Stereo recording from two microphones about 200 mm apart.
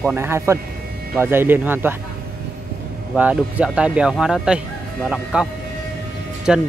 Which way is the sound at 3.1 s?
5° right (ahead or behind).